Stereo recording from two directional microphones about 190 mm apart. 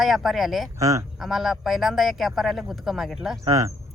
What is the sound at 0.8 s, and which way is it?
Speech, 15° right (ahead or behind).